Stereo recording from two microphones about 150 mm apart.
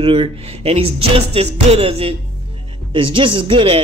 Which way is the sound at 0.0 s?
40° right (ahead or behind).